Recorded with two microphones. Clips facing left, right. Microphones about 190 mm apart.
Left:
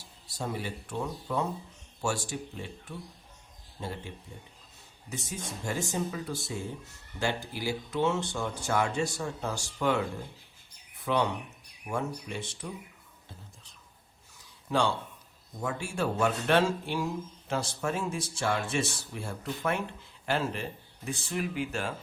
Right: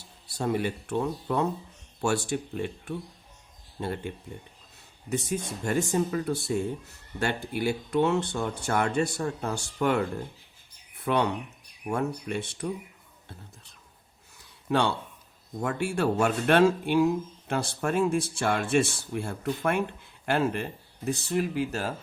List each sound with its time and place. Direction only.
0.3 s speech: 60° right (ahead or behind)
14.7 s speech: 60° right (ahead or behind)
21.0 s speech: 40° right (ahead or behind)